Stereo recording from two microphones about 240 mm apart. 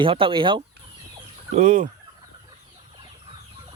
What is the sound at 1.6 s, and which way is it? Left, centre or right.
Fowl, right.